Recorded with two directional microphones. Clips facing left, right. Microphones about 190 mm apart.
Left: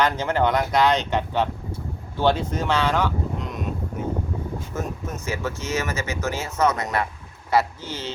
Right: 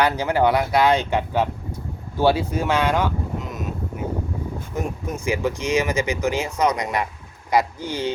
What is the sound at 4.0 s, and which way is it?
Vehicle, 10° right (ahead or behind).